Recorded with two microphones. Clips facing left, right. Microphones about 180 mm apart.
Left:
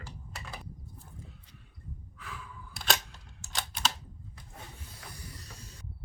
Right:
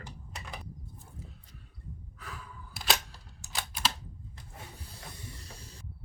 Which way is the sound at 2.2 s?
40° right (ahead or behind).